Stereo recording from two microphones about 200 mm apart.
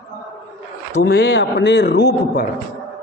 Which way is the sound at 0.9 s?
50° left (ahead or behind).